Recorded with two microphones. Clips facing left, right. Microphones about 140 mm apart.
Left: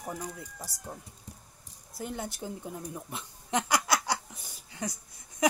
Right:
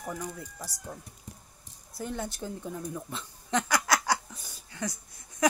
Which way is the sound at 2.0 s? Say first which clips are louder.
Right 2 dB; 15° left (ahead or behind).